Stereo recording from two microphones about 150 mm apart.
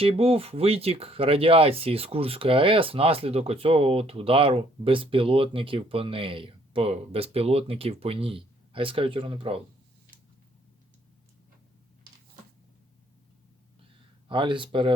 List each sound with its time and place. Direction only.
0.0 s speech: 40° right (ahead or behind)
14.3 s speech: 35° right (ahead or behind)